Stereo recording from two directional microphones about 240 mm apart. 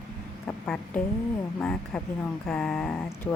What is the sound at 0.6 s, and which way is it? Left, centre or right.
Speech, centre.